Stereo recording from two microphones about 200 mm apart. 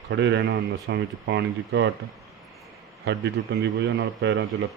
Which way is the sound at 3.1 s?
60° right (ahead or behind).